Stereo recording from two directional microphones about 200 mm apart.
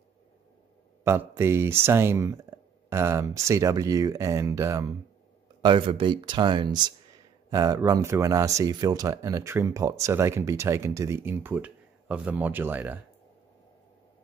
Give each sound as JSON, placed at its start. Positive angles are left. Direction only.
{"t": 1.0, "sound": "speech", "side_deg": -15}